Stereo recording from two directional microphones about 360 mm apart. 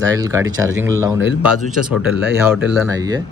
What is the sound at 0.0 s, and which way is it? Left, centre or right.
Speech, centre.